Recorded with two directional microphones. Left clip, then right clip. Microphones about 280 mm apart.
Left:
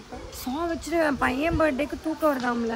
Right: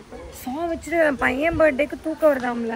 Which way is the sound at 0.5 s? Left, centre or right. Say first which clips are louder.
Right 4 dB; centre.